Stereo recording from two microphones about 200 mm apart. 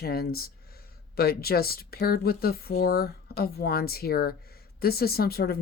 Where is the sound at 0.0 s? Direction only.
50° left (ahead or behind).